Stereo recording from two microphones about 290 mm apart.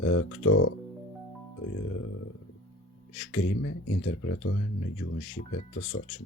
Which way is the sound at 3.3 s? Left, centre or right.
Left.